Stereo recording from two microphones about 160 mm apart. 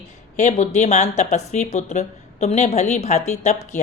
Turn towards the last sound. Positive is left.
turn(degrees=45)  # may be behind; listen again after turning